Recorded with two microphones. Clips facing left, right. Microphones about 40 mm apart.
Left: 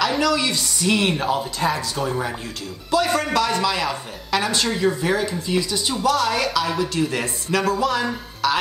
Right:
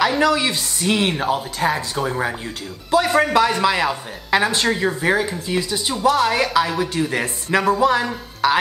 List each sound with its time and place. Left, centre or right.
0.2 s speech: right